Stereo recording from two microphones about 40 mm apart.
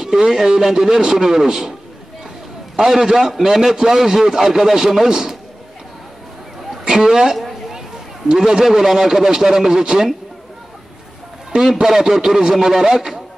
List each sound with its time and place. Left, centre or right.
0.2 s a man's voice: centre
2.8 s a man's voice: centre
6.8 s a man's voice: centre
11.8 s a man's voice: centre